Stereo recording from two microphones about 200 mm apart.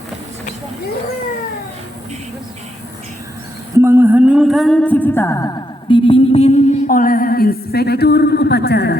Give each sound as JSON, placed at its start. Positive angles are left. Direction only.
{"t": 3.8, "sound": "music", "side_deg": -15}